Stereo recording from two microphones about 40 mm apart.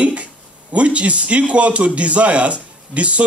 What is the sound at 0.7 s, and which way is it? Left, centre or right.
A man's voice, right.